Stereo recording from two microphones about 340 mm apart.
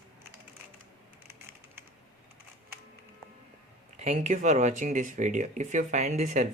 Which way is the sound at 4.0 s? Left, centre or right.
Right.